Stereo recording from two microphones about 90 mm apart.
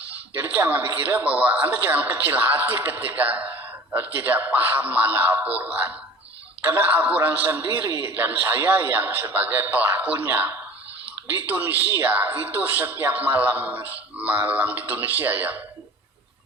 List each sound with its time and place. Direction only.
0.3 s speech: 25° right (ahead or behind)